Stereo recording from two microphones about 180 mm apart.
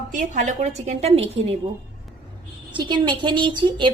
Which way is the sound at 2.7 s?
25° right (ahead or behind).